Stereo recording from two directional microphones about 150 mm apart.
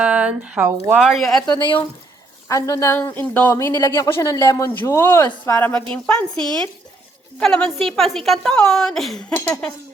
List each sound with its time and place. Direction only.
0.0 s a woman's voice: 10° right (ahead or behind)
2.5 s a woman's voice: 25° left (ahead or behind)